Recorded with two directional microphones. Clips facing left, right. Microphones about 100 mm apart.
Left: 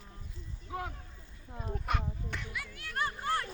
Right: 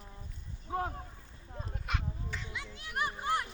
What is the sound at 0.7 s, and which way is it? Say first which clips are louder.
Speech: right 4 dB; 35° right (ahead or behind).